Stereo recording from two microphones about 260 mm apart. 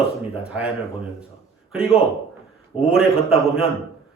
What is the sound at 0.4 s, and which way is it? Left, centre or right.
Speech, centre.